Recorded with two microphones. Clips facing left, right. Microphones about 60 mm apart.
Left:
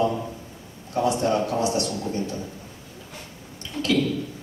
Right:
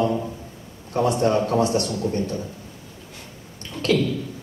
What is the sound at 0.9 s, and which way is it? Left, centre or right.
A man's voice, right.